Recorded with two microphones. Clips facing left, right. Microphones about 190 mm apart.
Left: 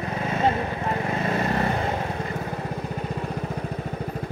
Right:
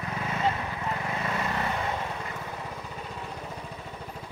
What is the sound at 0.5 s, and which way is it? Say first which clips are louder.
Vehicle: left 6 dB; 40° left (ahead or behind).